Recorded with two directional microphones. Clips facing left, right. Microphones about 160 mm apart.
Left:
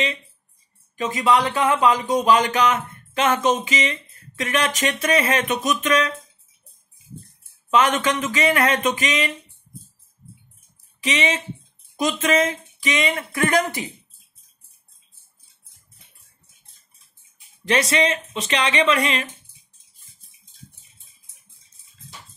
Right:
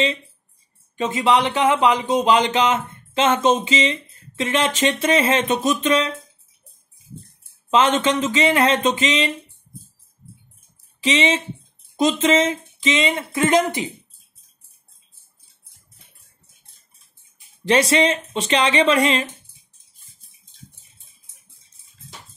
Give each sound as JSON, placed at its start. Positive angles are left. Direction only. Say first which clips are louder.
{"t": 0.9, "sound": "speech", "louder": "right 1 dB", "side_deg": -25}
{"t": 7.7, "sound": "speech", "louder": "right 2 dB", "side_deg": -30}
{"t": 11.0, "sound": "speech", "louder": "right 4 dB", "side_deg": -30}
{"t": 17.6, "sound": "speech", "louder": "right 3 dB", "side_deg": -30}